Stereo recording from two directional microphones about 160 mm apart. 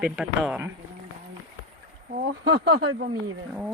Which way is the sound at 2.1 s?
90° right.